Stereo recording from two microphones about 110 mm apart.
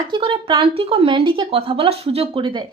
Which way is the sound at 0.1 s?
50° right (ahead or behind).